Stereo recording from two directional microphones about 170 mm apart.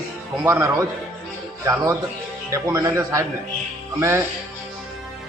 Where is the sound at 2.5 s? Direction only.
15° right (ahead or behind).